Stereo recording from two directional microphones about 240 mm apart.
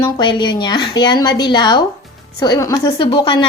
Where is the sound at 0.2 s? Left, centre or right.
Centre.